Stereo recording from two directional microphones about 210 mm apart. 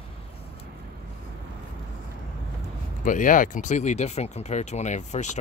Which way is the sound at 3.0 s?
40° left (ahead or behind).